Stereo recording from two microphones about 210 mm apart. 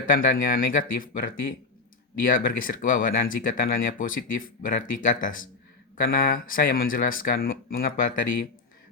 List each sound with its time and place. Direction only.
0.0 s speech: 40° left (ahead or behind)